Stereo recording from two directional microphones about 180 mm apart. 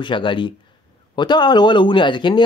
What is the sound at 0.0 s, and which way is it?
Speech, 25° left (ahead or behind).